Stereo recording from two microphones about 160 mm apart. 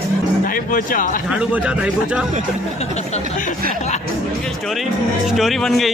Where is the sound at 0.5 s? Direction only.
60° left (ahead or behind).